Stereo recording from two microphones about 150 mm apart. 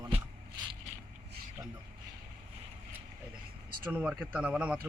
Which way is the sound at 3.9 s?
10° right (ahead or behind).